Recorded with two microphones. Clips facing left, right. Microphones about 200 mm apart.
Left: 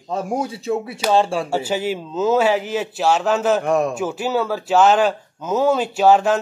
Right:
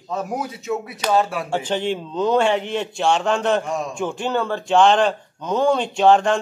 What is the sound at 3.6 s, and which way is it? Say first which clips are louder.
Speech: left 7 dB; 60° left (ahead or behind).